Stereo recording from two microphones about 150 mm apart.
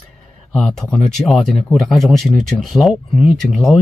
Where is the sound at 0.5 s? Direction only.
5° left (ahead or behind).